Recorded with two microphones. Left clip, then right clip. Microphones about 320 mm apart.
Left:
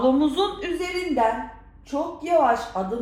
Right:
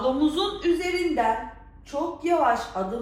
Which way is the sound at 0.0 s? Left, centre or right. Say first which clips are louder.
Left 3 dB; centre.